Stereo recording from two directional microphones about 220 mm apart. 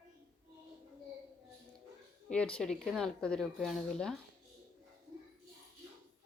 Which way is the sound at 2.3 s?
5° left (ahead or behind).